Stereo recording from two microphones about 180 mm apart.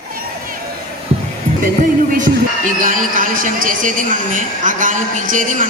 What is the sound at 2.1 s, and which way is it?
A man's voice, 50° right (ahead or behind).